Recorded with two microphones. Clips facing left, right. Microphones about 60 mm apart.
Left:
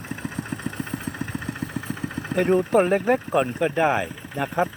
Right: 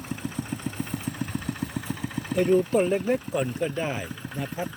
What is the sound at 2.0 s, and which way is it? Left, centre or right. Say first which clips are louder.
Speech: left 2 dB; left.